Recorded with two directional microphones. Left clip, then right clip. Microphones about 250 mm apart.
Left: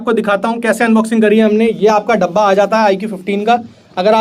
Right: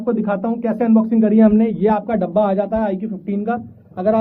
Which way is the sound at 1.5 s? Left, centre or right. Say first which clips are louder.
Left 5 dB; right.